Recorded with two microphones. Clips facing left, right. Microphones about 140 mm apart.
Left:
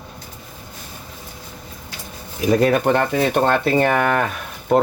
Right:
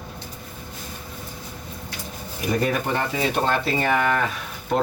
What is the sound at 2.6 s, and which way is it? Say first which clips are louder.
Speech: left 7 dB; 80° left.